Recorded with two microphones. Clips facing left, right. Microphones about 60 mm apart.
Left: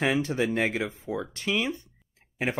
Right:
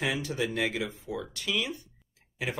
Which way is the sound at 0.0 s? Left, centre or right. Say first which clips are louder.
Left 5 dB; left.